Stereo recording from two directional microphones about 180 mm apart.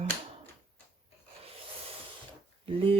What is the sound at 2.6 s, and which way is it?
Speech, 30° right (ahead or behind).